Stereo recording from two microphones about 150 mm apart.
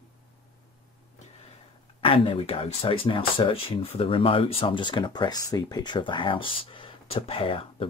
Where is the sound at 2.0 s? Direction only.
35° left (ahead or behind).